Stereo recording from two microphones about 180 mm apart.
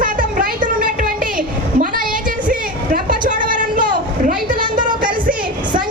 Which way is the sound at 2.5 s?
50° right (ahead or behind).